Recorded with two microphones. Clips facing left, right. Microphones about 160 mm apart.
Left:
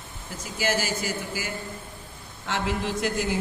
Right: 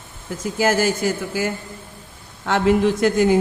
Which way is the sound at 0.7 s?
55° right (ahead or behind).